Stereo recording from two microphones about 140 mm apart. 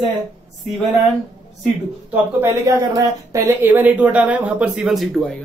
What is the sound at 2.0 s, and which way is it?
Speech, 15° right (ahead or behind).